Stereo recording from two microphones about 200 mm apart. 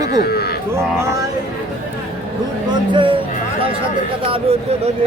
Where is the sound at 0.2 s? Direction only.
50° left (ahead or behind).